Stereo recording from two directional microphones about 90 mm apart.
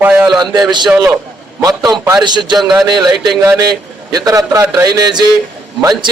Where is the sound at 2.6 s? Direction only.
45° right (ahead or behind).